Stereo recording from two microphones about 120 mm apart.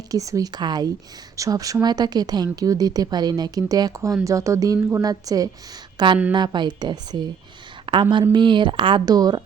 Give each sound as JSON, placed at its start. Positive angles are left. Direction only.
{"t": 0.1, "sound": "a woman's voice", "side_deg": -30}
{"t": 7.9, "sound": "a sound", "side_deg": -45}
{"t": 8.3, "sound": "speech", "side_deg": -40}